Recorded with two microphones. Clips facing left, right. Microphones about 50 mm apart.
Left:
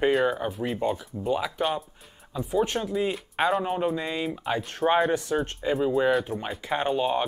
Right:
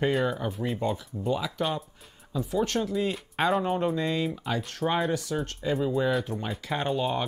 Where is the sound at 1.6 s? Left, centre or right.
Centre.